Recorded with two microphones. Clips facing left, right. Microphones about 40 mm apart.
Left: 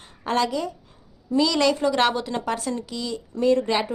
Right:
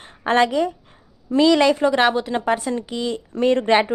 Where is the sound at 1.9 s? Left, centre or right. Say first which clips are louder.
Right 4 dB; centre.